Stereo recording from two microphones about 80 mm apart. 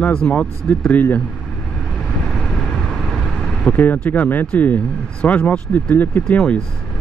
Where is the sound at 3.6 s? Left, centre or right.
Centre.